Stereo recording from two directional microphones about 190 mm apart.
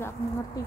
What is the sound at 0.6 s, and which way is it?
Speech, 20° left (ahead or behind).